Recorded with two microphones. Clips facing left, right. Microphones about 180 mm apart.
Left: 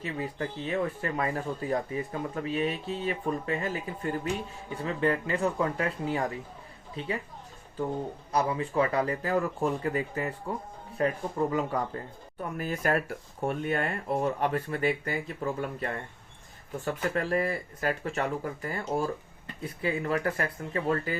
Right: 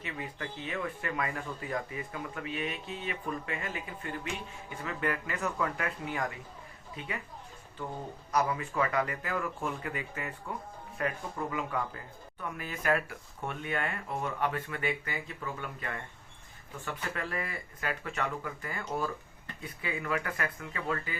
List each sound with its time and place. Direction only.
0.0 s speech: 35° left (ahead or behind)
8.3 s speech: 30° left (ahead or behind)